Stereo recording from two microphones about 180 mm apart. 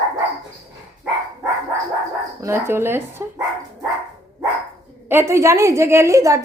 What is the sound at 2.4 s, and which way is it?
Speech, 15° right (ahead or behind).